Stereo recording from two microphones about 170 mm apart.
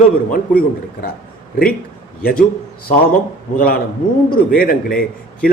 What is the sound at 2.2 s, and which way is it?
Speech, 60° left (ahead or behind).